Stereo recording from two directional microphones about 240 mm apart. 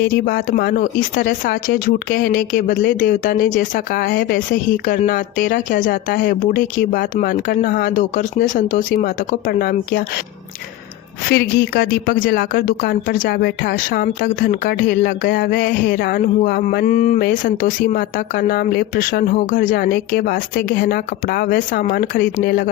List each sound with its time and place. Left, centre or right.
0.1 s a woman's voice: left
11.3 s a woman's voice: left